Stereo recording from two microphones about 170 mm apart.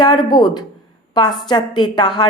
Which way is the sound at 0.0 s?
25° left (ahead or behind).